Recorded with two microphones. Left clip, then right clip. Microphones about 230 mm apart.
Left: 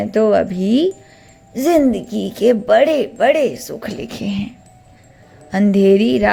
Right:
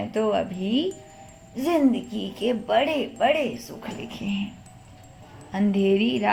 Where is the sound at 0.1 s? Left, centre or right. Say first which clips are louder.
Left 10 dB; left.